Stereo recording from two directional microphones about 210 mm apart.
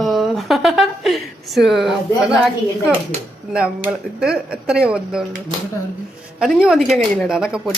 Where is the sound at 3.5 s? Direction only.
5° right (ahead or behind).